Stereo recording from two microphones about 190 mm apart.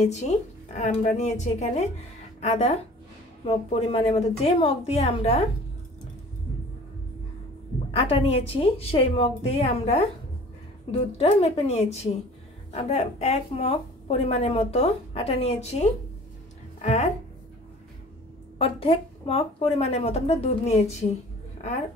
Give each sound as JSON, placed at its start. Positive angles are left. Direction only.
{"t": 0.0, "sound": "a woman's voice", "side_deg": 35}
{"t": 7.9, "sound": "a woman's voice", "side_deg": 30}
{"t": 18.6, "sound": "a woman's voice", "side_deg": 30}